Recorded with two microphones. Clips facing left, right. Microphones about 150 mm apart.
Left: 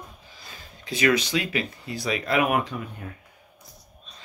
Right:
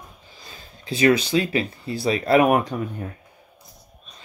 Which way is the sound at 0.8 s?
30° right (ahead or behind).